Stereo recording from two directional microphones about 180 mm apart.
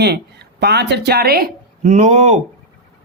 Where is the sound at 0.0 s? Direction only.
65° right (ahead or behind).